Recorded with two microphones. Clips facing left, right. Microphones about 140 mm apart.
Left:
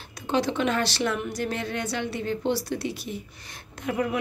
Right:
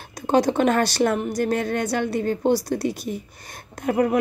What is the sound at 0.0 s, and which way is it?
A woman's voice, 45° right (ahead or behind).